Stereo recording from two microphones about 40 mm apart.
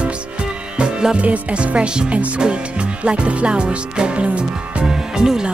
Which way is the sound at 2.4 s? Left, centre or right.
Right.